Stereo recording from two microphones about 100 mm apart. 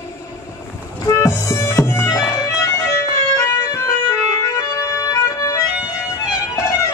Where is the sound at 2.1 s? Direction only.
35° left (ahead or behind).